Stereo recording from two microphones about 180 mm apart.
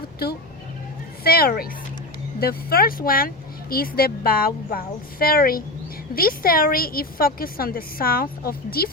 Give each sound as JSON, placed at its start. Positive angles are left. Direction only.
{"t": 1.2, "sound": "speech", "side_deg": 60}